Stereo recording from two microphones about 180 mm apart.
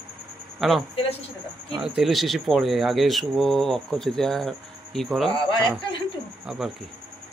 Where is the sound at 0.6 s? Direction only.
Centre (ahead or behind).